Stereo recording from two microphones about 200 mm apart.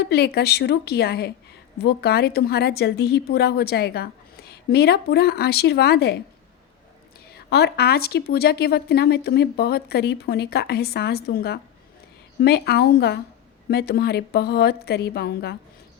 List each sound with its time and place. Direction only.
0.0 s a woman's voice: 55° left (ahead or behind)
7.3 s a woman's voice: 55° left (ahead or behind)